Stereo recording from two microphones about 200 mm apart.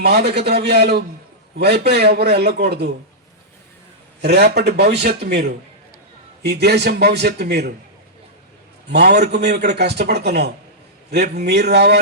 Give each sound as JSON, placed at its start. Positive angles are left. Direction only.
{"t": 0.0, "sound": "a man's voice", "side_deg": -55}
{"t": 4.2, "sound": "a man's voice", "side_deg": -55}
{"t": 8.9, "sound": "a man's voice", "side_deg": -55}